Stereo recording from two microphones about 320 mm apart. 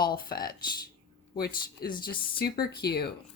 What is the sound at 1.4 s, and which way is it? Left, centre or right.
Speech, left.